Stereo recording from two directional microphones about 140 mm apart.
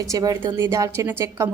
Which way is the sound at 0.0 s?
25° right (ahead or behind).